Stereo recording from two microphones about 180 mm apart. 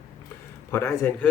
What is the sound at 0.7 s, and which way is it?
Speech, 15° left (ahead or behind).